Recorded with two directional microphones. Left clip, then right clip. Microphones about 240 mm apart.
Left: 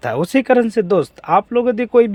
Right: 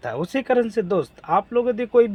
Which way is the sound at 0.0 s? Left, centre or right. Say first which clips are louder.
Left 8 dB; left.